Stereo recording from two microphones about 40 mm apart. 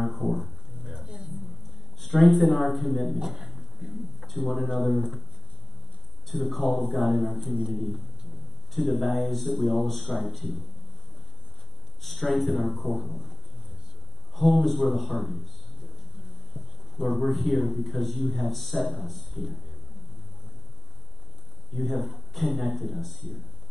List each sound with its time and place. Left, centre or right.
0.0 s a sound: centre
0.9 s a sound: right
2.0 s a man's voice: centre
6.2 s speech: centre
8.7 s speech: centre
12.0 s speech: centre
16.5 s a sound: centre
17.3 s speech: centre
21.7 s speech: centre